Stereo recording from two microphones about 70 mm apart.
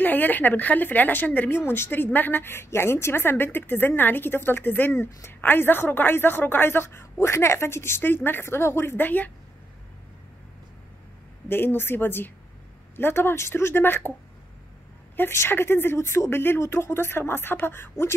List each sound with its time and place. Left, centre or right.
0.0 s a woman's voice: left
11.4 s a woman's voice: left
15.1 s a woman's voice: left